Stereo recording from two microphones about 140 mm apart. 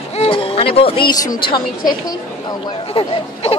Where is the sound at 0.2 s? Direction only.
40° left (ahead or behind).